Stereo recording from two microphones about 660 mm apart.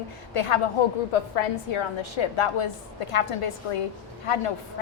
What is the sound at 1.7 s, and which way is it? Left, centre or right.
A woman's voice, left.